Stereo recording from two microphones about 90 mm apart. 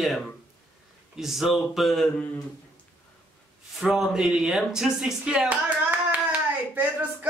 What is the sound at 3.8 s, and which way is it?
Speech, 5° right (ahead or behind).